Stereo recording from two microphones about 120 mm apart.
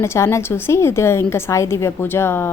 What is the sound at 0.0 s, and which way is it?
A woman's voice, 20° left (ahead or behind).